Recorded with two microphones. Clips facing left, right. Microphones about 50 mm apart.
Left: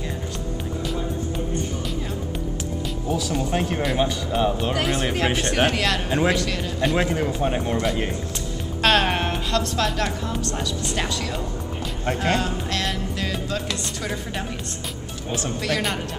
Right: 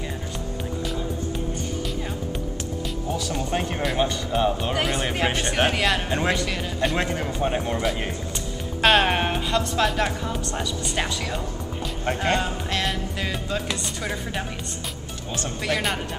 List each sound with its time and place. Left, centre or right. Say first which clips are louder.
3.1 s speech: left 3 dB; centre
12.1 s speech: left 1 dB; centre
15.6 s speech: right 1 dB; centre